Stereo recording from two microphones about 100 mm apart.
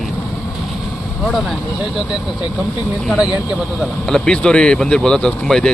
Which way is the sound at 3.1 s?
10° right (ahead or behind).